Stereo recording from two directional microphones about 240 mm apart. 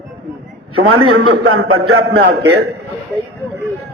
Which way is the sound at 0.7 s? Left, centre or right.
Right.